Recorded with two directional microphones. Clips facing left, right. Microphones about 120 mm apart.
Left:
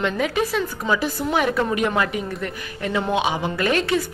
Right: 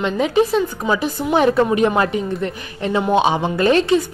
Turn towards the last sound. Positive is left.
turn(degrees=-30)  # may be behind; listen again after turning